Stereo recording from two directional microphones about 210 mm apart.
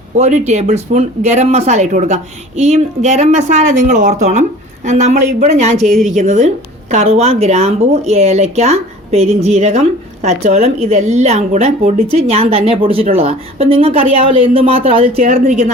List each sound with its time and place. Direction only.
0.2 s a woman's voice: 35° right (ahead or behind)